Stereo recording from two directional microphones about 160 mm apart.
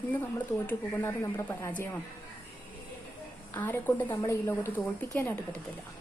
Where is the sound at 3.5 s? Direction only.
10° left (ahead or behind).